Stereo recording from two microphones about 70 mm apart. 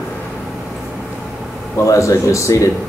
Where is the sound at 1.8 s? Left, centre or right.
Left.